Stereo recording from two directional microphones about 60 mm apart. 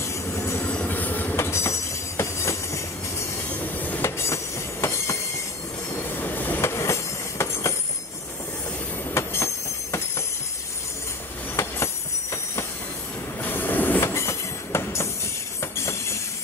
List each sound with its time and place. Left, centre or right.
0.0 s train: left
0.8 s train: left
1.3 s train: left
4.0 s train: left
6.2 s train: left
6.6 s train: left
9.1 s train: left
11.5 s train: left
13.4 s train: left
14.0 s train: left